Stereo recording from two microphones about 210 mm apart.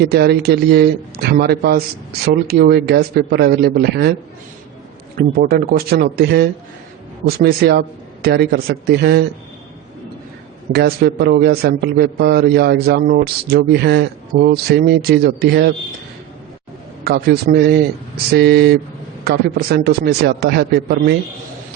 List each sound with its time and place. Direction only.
0.0 s a man's voice: 50° right (ahead or behind)
5.1 s a man's voice: 45° right (ahead or behind)
10.7 s a man's voice: 50° right (ahead or behind)
17.0 s a man's voice: 50° right (ahead or behind)